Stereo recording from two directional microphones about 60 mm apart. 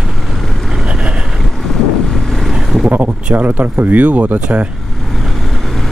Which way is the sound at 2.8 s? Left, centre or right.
Right.